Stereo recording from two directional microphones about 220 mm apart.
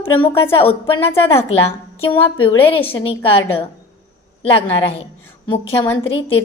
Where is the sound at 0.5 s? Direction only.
25° left (ahead or behind).